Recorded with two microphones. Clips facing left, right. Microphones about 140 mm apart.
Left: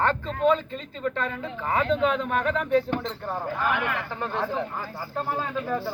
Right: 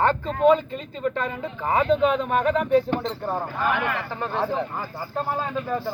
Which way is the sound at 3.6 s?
Centre (ahead or behind).